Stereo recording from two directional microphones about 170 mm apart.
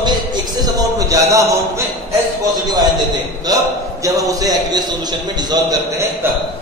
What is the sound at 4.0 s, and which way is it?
A man's voice, 20° right (ahead or behind).